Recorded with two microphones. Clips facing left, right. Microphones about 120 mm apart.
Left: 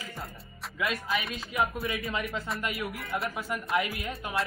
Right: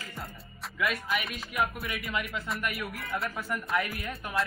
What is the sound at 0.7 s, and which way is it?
Speech, 25° left (ahead or behind).